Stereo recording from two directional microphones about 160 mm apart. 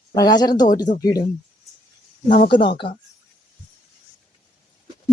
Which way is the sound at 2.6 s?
35° left (ahead or behind).